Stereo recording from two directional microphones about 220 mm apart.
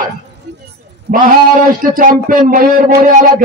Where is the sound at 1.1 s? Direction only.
40° right (ahead or behind).